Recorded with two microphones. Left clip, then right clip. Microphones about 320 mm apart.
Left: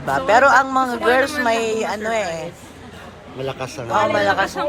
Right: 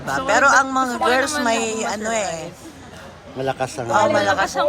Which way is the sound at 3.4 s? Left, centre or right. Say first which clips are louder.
Right 4 dB; right.